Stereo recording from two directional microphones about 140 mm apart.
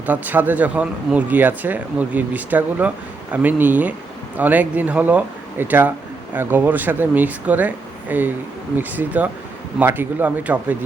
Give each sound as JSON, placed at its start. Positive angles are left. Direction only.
{"t": 0.0, "sound": "speech", "side_deg": -10}